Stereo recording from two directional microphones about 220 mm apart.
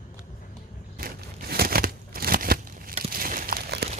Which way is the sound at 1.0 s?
45° right (ahead or behind).